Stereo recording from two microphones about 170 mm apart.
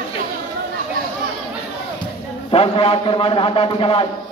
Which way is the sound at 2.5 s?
35° left (ahead or behind).